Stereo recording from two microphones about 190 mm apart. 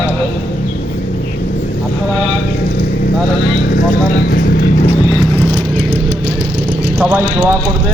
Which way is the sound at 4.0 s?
50° left (ahead or behind).